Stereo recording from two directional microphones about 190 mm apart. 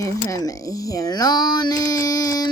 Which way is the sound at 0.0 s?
15° left (ahead or behind).